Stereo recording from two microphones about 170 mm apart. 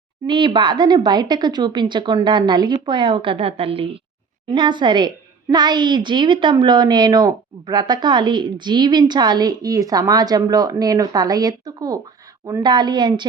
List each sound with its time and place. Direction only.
0.3 s a woman's voice: 25° right (ahead or behind)